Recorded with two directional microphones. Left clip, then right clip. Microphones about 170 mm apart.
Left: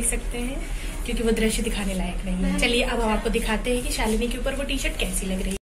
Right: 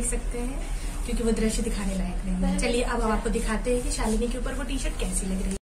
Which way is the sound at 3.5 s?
10° right (ahead or behind).